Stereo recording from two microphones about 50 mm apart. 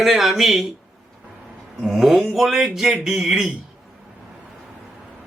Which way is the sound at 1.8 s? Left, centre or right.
Centre.